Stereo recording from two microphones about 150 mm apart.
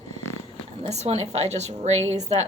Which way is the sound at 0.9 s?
45° right (ahead or behind).